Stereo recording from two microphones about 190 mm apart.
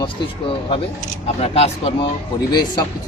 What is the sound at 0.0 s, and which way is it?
Speech, 30° left (ahead or behind).